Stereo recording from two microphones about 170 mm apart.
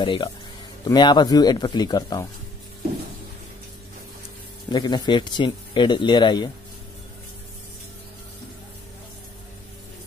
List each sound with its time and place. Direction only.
0.0 s speech: 30° left (ahead or behind)
4.6 s speech: 25° left (ahead or behind)